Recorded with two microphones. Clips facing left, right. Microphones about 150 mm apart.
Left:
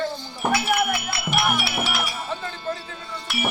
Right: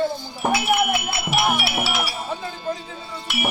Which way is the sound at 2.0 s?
10° right (ahead or behind).